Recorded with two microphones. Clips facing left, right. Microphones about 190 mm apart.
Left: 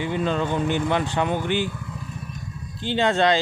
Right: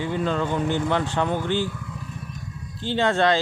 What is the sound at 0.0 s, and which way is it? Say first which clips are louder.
Speech: left 1 dB; 20° left (ahead or behind).